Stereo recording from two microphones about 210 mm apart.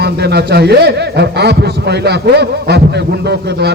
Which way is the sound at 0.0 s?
50° right (ahead or behind).